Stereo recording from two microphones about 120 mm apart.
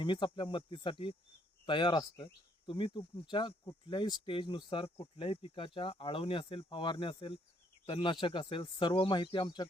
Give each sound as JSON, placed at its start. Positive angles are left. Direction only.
{"t": 0.0, "sound": "speech", "side_deg": 40}